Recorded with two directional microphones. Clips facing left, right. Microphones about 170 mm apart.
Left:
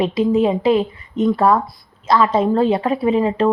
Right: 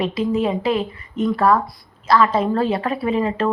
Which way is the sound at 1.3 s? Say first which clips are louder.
Even; 20° left (ahead or behind).